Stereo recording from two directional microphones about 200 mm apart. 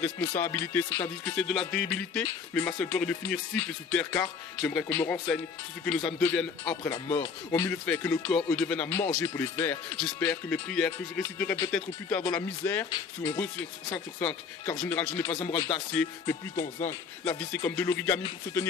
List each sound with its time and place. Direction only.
0.4 s a man's voice: 10° left (ahead or behind)
15.3 s speech: 25° left (ahead or behind)
15.6 s speech: 5° left (ahead or behind)